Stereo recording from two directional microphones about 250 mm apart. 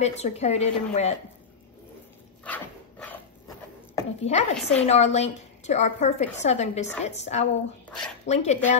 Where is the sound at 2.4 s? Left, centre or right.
Centre.